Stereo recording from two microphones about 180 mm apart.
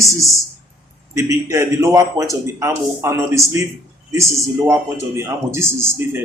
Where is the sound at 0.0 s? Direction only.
15° right (ahead or behind).